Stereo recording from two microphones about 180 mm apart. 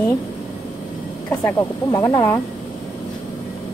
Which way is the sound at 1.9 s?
20° left (ahead or behind).